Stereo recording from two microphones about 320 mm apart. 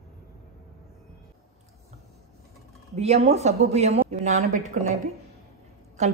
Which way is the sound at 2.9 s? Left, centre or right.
Centre.